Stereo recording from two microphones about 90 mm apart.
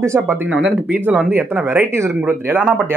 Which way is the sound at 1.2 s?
20° right (ahead or behind).